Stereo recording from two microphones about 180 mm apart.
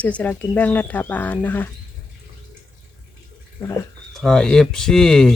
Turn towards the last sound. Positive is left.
turn(degrees=5)  # may be behind; listen again after turning